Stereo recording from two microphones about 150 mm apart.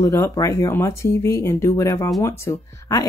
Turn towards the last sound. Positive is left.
turn(degrees=20)  # may be behind; listen again after turning